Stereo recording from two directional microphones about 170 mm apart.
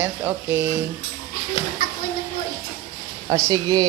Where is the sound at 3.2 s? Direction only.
20° right (ahead or behind).